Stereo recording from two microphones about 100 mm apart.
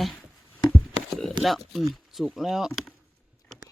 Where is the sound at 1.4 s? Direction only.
Centre (ahead or behind).